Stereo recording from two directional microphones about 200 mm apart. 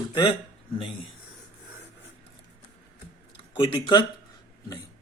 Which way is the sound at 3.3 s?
20° left (ahead or behind).